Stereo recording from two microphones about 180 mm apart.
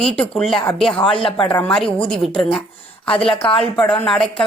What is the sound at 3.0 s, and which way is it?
Speech, 30° left (ahead or behind).